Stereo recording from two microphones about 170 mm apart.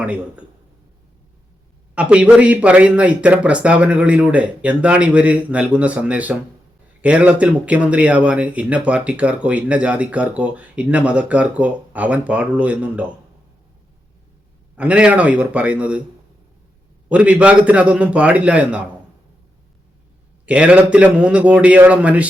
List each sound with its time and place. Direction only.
0.0 s speech: 5° right (ahead or behind)
2.0 s speech: 5° right (ahead or behind)
14.8 s speech: 5° right (ahead or behind)
17.1 s speech: 5° right (ahead or behind)
20.5 s speech: 5° right (ahead or behind)